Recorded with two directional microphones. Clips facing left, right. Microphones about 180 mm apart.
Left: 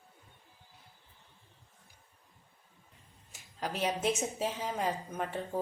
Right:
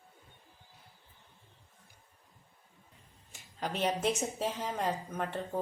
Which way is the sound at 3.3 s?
5° left (ahead or behind).